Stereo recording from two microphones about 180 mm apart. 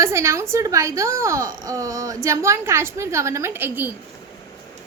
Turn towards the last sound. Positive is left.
turn(degrees=-10)  # may be behind; listen again after turning